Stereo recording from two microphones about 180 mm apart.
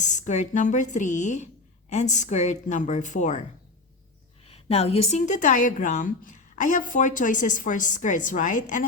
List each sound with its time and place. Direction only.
0.0 s a woman's voice: 40° left (ahead or behind)
4.4 s a woman's voice: 35° left (ahead or behind)